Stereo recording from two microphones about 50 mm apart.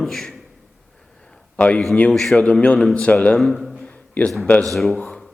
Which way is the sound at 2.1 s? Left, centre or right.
Centre.